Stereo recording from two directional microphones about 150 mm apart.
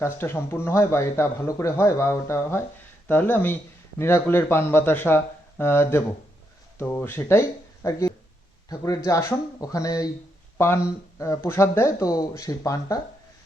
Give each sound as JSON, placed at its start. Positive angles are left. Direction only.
{"t": 0.0, "sound": "speech", "side_deg": 15}
{"t": 11.2, "sound": "speech", "side_deg": 20}